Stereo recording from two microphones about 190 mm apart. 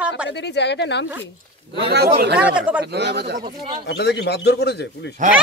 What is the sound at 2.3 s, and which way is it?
Speech, 5° right (ahead or behind).